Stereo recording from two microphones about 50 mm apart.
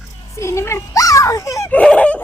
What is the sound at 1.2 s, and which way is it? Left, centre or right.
Speech, left.